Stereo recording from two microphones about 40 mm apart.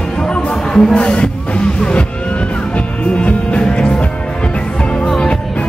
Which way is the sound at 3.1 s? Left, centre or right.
Left.